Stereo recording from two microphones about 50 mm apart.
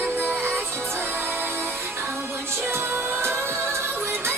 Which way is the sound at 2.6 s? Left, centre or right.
Right.